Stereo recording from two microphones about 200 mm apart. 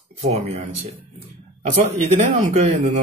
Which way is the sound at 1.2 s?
35° right (ahead or behind).